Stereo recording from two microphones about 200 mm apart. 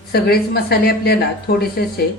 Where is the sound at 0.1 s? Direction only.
50° left (ahead or behind).